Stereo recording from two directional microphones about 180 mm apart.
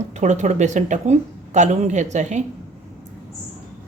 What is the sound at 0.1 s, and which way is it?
A woman's voice, 40° right (ahead or behind).